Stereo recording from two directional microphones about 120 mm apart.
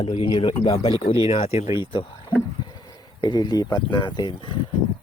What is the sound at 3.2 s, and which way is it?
Speech, 35° left (ahead or behind).